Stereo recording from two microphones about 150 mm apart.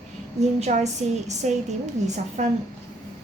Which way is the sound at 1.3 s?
50° right (ahead or behind).